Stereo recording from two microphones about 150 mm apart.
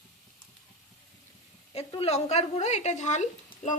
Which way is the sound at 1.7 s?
45° left (ahead or behind).